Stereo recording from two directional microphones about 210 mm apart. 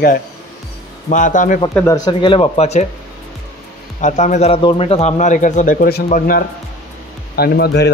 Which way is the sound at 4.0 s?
35° left (ahead or behind).